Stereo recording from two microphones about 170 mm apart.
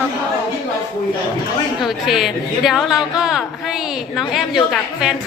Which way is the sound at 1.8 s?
Centre (ahead or behind).